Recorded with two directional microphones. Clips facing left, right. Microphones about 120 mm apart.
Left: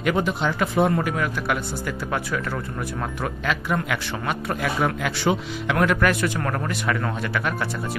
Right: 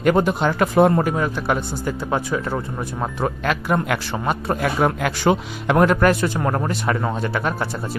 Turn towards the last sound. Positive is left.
turn(degrees=-30)  # may be behind; listen again after turning